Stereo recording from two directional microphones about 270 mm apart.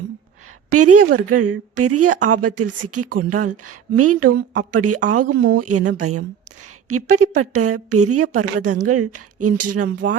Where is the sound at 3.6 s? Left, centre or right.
Right.